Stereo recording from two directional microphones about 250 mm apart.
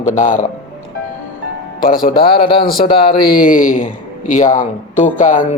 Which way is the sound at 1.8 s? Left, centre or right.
Left.